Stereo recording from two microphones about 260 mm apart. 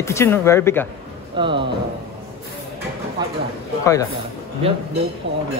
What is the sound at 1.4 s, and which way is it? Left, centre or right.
Speech, centre.